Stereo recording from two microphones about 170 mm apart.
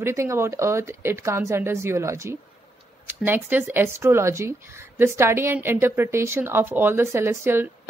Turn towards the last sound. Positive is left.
turn(degrees=-15)  # may be behind; listen again after turning